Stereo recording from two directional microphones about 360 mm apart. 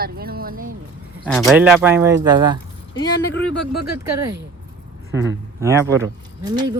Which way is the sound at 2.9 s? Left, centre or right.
Left.